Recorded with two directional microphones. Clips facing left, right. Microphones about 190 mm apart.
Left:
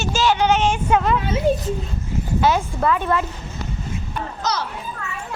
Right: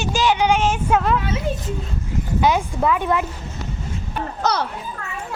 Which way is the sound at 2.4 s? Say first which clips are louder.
Right 1 dB; 15° right (ahead or behind).